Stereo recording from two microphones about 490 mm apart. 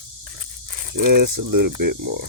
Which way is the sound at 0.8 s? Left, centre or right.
Right.